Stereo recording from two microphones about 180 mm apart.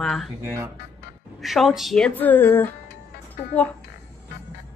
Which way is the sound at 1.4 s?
Centre (ahead or behind).